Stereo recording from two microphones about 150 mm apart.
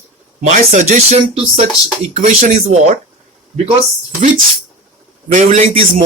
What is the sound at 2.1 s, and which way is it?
Speech, 50° right (ahead or behind).